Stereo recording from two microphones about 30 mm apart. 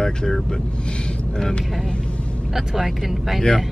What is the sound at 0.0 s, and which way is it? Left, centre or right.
Speech, left.